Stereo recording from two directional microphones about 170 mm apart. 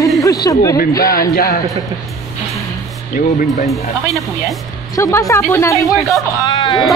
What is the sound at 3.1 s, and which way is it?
Speech, 55° left (ahead or behind).